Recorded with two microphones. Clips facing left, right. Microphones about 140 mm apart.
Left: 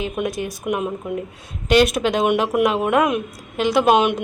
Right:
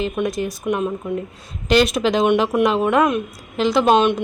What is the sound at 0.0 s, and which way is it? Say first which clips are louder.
Speech: right 2 dB; 5° left (ahead or behind).